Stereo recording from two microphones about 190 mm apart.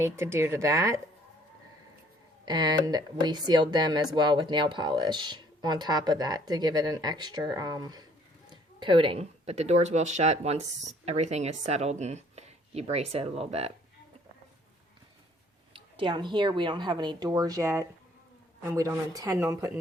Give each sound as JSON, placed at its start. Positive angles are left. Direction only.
{"t": 0.0, "sound": "speech", "side_deg": -15}
{"t": 2.4, "sound": "speech", "side_deg": -20}
{"t": 15.7, "sound": "speech", "side_deg": -25}